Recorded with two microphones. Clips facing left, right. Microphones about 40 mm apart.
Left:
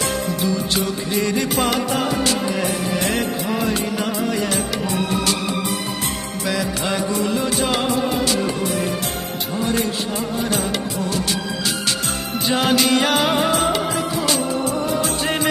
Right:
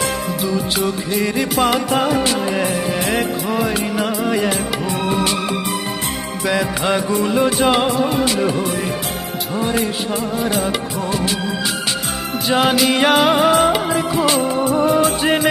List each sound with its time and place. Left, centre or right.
0.4 s music: centre
1.4 s music of bollywood: centre
5.0 s music: right
6.5 s music: centre
7.9 s music of bollywood: centre
8.1 s music: right
9.6 s music of bollywood: centre
12.5 s music of bollywood: centre
13.7 s music of bollywood: centre
15.2 s music: centre